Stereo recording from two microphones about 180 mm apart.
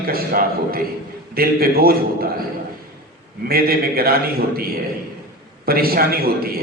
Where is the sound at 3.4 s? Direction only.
55° right (ahead or behind).